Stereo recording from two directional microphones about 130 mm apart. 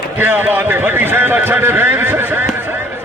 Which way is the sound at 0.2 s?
15° right (ahead or behind).